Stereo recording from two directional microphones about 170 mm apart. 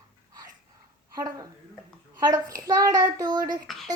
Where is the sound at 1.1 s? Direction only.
20° right (ahead or behind).